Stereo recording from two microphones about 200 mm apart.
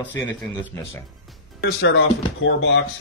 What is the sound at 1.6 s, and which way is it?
Speech, 70° left (ahead or behind).